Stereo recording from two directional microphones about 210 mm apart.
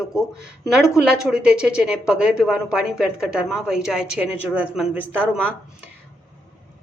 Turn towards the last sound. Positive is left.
turn(degrees=-10)  # may be behind; listen again after turning